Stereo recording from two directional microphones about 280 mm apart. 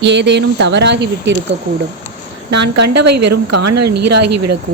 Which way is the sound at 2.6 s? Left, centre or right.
Right.